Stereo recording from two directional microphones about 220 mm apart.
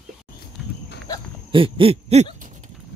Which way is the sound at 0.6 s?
Centre (ahead or behind).